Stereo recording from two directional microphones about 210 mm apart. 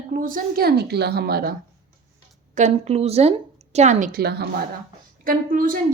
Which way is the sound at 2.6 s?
30° right (ahead or behind).